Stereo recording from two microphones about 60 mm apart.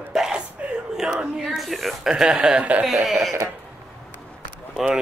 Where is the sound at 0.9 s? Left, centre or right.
Centre.